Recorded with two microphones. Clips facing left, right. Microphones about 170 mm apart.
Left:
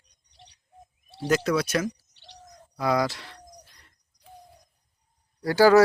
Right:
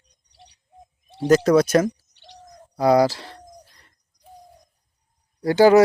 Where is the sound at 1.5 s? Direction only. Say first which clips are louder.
Right 9 dB; 45° right (ahead or behind).